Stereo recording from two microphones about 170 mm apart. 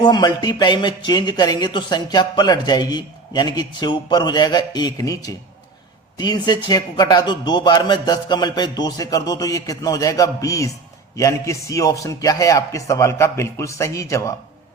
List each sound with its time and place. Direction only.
0.0 s speech: 25° left (ahead or behind)